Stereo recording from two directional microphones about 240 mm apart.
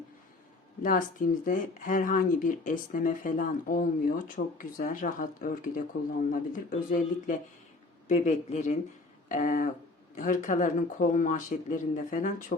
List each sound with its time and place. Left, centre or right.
0.8 s speech: left